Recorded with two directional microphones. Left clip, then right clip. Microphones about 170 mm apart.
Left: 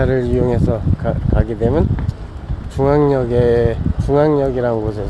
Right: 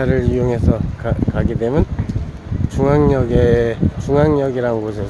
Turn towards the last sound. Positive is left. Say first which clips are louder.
# left 1 dB
turn(degrees=0)  # may be behind; listen again after turning